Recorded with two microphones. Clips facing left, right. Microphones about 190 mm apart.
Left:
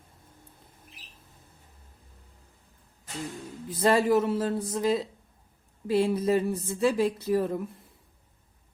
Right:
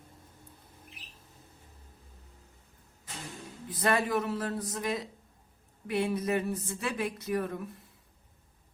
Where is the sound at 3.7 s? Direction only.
30° left (ahead or behind).